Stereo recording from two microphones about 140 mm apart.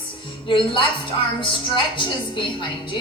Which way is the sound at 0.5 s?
35° left (ahead or behind).